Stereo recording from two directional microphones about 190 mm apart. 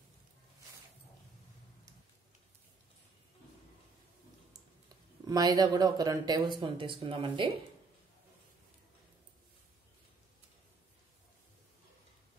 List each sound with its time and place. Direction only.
5.2 s speech: 20° right (ahead or behind)